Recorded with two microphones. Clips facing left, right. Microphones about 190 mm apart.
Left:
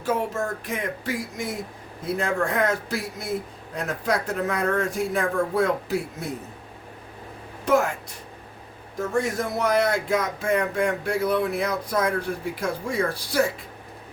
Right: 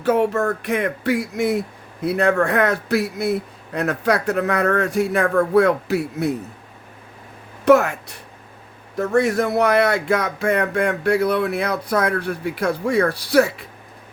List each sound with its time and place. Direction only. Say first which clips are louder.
0.0 s speech: right 8 dB; 65° right (ahead or behind)
7.6 s speech: right 7 dB; 70° right (ahead or behind)